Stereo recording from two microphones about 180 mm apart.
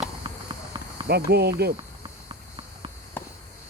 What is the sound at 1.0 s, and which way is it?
Speech, 65° right (ahead or behind).